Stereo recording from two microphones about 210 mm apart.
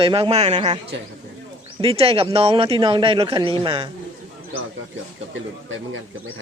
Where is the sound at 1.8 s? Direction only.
25° right (ahead or behind).